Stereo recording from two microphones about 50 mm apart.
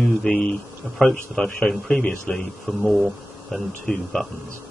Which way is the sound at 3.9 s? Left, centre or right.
Centre.